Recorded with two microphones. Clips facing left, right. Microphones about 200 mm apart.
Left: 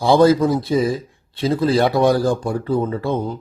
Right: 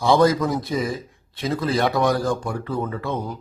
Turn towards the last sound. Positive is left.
turn(degrees=25)  # may be behind; listen again after turning